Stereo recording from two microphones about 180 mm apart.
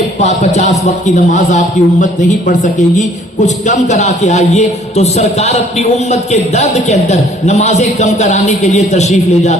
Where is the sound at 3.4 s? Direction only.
40° left (ahead or behind).